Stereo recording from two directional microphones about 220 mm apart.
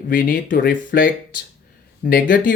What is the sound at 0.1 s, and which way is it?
Speech, 40° left (ahead or behind).